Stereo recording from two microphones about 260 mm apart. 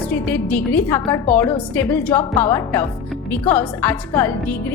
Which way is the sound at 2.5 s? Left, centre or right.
Centre.